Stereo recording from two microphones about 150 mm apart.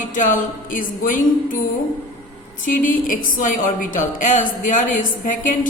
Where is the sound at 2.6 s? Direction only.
65° left (ahead or behind).